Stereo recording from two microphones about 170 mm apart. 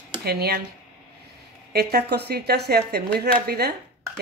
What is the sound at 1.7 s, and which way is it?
Speech, 70° right (ahead or behind).